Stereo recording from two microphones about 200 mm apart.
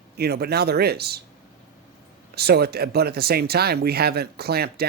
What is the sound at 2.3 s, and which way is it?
Speech, 55° right (ahead or behind).